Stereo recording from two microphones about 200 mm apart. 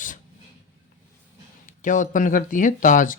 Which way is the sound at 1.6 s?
40° left (ahead or behind).